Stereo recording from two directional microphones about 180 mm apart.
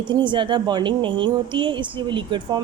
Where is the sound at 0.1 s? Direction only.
25° right (ahead or behind).